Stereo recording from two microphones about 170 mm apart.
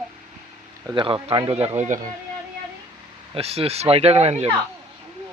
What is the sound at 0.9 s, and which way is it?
Speech, 30° right (ahead or behind).